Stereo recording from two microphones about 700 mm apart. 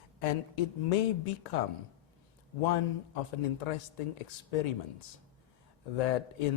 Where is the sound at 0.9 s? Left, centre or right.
Left.